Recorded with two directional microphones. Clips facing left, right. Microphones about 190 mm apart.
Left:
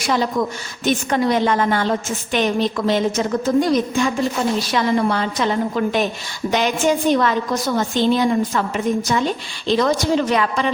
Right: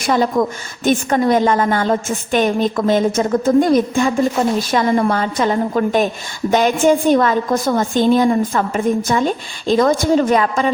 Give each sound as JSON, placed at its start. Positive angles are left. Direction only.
{"t": 0.1, "sound": "a woman's voice", "side_deg": -50}